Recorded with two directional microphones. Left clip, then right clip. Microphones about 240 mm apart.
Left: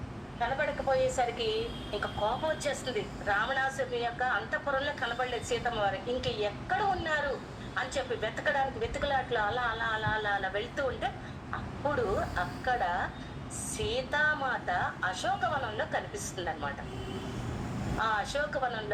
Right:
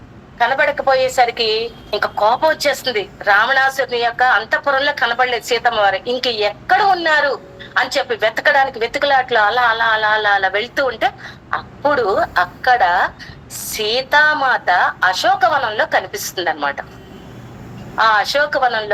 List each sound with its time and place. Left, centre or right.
0.3 s a woman's voice: right
17.9 s a woman's voice: right